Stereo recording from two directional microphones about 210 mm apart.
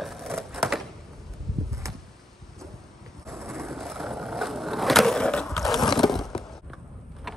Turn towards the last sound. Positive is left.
turn(degrees=0)  # may be behind; listen again after turning